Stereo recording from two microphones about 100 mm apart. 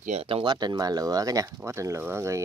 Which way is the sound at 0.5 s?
40° right (ahead or behind).